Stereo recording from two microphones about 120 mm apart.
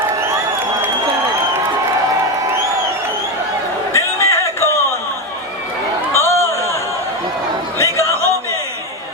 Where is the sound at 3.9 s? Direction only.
25° left (ahead or behind).